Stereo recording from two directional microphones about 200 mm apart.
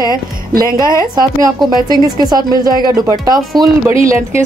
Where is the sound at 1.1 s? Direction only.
20° right (ahead or behind).